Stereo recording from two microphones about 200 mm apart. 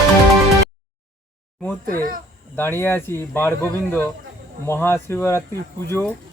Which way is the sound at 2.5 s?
10° left (ahead or behind).